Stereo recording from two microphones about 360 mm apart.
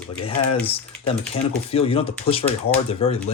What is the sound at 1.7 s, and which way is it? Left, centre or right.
Speech, centre.